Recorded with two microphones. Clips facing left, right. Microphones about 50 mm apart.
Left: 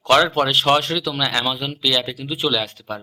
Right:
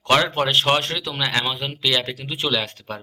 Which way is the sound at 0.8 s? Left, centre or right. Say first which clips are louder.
Left 3 dB; right.